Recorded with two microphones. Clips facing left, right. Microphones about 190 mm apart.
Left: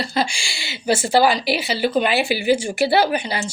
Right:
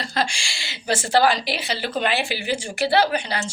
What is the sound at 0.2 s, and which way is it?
Speech, centre (ahead or behind).